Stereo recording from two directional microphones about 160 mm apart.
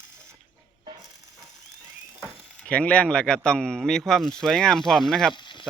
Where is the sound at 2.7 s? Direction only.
5° left (ahead or behind).